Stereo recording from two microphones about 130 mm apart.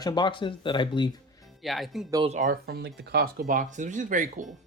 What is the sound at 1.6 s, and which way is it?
Speech, centre (ahead or behind).